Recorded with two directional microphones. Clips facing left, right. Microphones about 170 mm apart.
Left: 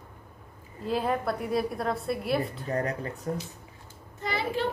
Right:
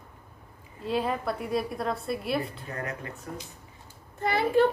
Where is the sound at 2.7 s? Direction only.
35° left (ahead or behind).